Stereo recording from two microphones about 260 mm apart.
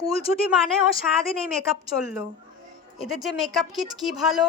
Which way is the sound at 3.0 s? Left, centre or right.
Centre.